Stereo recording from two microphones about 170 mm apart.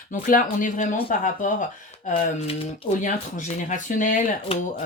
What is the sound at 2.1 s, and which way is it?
Speech, 35° left (ahead or behind).